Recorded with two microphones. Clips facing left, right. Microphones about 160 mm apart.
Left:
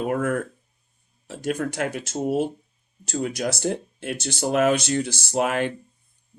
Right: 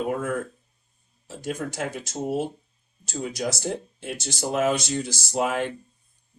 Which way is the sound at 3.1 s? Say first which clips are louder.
Left 3 dB; 65° left (ahead or behind).